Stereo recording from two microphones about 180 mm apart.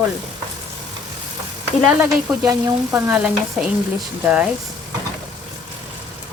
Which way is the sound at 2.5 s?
15° right (ahead or behind).